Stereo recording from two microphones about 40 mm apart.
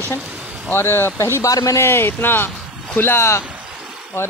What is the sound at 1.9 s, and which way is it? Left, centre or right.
Speech, left.